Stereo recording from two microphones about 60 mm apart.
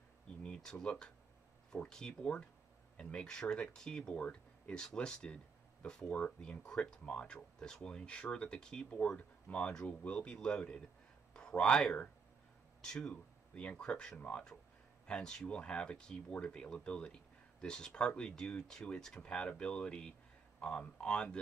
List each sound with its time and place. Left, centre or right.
0.6 s speech: centre